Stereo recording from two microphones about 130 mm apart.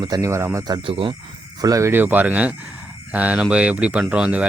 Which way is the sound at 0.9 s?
45° right (ahead or behind).